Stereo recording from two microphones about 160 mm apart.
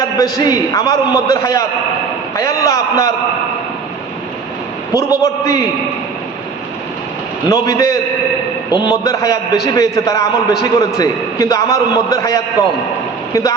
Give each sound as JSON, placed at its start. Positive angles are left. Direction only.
{"t": 0.2, "sound": "a man's voice", "side_deg": 20}
{"t": 4.9, "sound": "a man's voice", "side_deg": 20}
{"t": 7.5, "sound": "a man's voice", "side_deg": 20}